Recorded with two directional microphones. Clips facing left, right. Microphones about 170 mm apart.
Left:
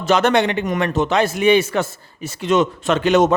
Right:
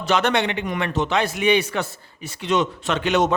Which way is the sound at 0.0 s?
45° left (ahead or behind).